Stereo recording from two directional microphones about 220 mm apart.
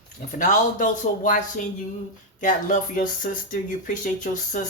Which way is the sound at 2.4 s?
35° left (ahead or behind).